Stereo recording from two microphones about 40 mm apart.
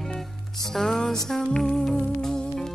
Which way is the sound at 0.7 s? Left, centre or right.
Centre.